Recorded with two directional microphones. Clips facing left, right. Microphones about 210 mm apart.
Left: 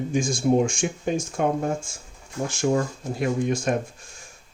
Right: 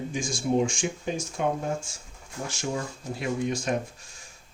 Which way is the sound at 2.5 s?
50° left (ahead or behind).